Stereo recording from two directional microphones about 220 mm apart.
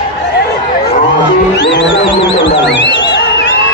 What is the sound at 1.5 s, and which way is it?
Wild animals, 50° left (ahead or behind).